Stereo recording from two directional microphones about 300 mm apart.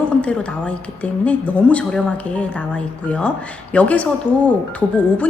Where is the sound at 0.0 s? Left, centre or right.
Centre.